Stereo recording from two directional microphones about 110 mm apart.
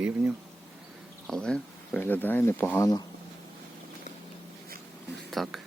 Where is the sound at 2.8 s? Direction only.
35° left (ahead or behind).